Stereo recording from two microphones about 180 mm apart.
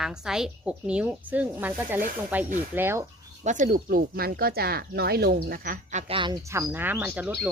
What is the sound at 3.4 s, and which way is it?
Speech, 45° right (ahead or behind).